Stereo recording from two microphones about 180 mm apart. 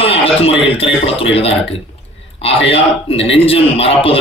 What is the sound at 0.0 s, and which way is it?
A man's voice, 30° left (ahead or behind).